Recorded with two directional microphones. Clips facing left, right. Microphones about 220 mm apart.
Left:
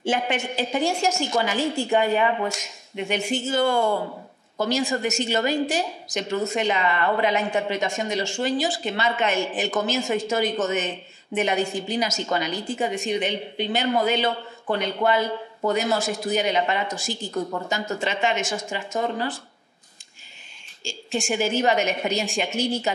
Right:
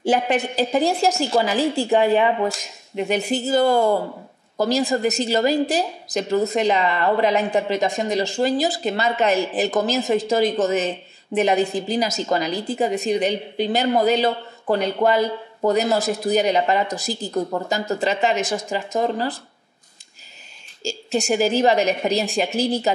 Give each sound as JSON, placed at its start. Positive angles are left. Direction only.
{"t": 0.0, "sound": "a woman's voice", "side_deg": -35}
{"t": 20.8, "sound": "a woman's voice", "side_deg": -40}